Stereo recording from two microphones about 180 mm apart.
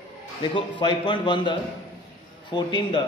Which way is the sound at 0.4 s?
25° left (ahead or behind).